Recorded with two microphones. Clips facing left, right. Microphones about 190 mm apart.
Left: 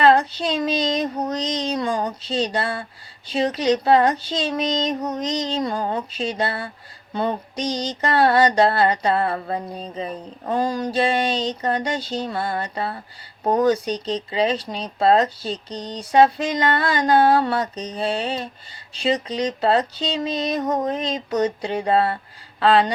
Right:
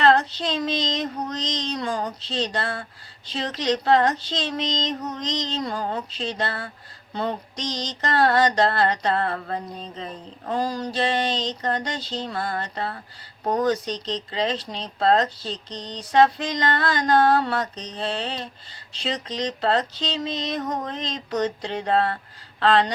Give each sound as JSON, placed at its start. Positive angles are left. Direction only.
{"t": 0.0, "sound": "child singing", "side_deg": 10}
{"t": 0.3, "sound": "speech", "side_deg": 10}
{"t": 10.6, "sound": "a sound", "side_deg": 55}
{"t": 10.9, "sound": "speech", "side_deg": 10}